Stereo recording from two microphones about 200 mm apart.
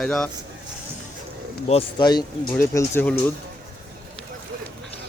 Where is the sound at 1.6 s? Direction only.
25° left (ahead or behind).